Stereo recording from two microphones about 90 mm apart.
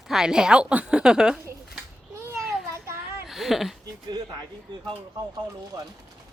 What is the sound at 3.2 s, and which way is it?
Speech, 5° right (ahead or behind).